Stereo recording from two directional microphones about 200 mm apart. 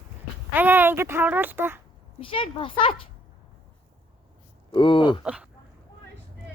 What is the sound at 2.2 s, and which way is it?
Speech, 25° left (ahead or behind).